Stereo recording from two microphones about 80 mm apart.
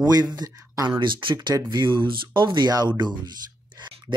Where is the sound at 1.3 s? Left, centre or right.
Right.